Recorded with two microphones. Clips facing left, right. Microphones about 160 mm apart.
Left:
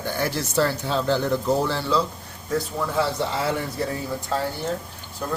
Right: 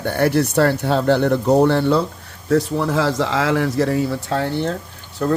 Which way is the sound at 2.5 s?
85° right.